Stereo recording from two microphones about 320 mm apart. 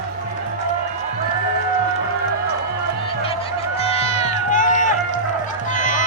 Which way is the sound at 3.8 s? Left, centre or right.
Centre.